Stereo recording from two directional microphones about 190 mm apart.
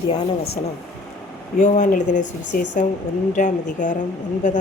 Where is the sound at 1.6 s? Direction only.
40° left (ahead or behind).